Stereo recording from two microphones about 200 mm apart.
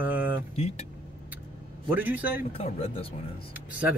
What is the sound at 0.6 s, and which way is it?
Speech, 30° left (ahead or behind).